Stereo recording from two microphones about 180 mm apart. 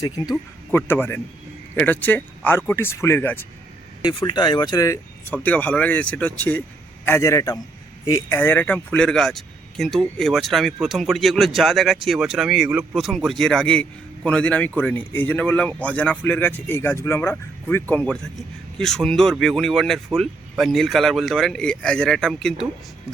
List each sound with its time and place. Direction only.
0.0 s speech: 15° left (ahead or behind)
4.0 s speech: 25° left (ahead or behind)
5.3 s speech: 10° left (ahead or behind)